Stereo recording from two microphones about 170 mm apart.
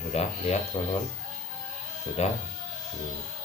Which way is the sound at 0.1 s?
40° left (ahead or behind).